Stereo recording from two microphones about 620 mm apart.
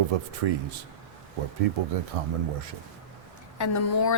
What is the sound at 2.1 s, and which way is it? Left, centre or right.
Speech, right.